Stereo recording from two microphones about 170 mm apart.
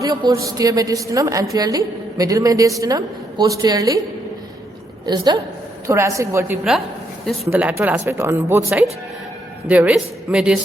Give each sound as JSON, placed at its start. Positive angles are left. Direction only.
{"t": 0.0, "sound": "a man's voice", "side_deg": -25}
{"t": 5.0, "sound": "a woman's voice", "side_deg": -25}